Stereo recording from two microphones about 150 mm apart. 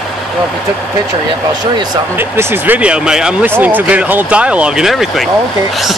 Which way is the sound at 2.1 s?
15° right (ahead or behind).